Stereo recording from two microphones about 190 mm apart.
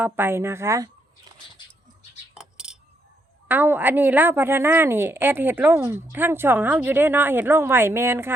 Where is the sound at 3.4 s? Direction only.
10° right (ahead or behind).